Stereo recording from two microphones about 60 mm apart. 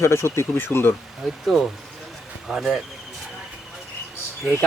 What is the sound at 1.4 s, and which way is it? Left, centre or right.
Speech, centre.